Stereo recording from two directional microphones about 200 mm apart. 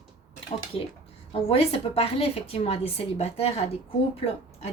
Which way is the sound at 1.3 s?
30° left (ahead or behind).